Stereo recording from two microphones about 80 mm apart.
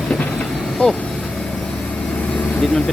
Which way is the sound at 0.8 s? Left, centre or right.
Centre.